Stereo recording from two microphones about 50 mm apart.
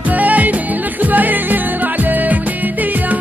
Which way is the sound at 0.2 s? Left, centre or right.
Right.